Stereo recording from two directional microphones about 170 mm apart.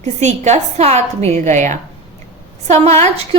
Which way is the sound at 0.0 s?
40° right (ahead or behind).